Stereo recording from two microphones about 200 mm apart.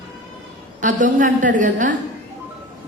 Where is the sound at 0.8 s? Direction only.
40° right (ahead or behind).